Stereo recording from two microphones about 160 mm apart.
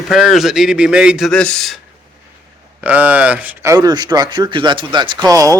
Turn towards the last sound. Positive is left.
turn(degrees=-20)  # may be behind; listen again after turning